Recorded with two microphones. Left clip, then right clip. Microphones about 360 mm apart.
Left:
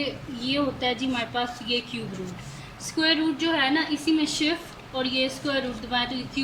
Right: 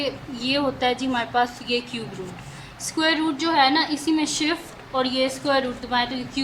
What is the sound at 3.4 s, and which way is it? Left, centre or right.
A woman's voice, centre.